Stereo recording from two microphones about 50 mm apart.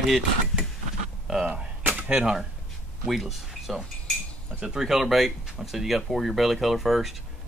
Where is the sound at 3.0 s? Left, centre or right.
Centre.